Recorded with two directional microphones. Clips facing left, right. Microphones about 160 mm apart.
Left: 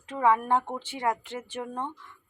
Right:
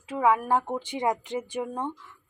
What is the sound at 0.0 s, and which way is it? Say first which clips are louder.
Speech: right 1 dB; 5° right (ahead or behind).